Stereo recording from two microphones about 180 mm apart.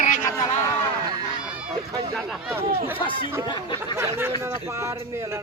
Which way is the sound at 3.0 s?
30° left (ahead or behind).